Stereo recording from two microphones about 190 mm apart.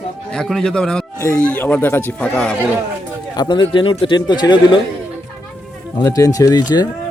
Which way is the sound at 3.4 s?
25° left (ahead or behind).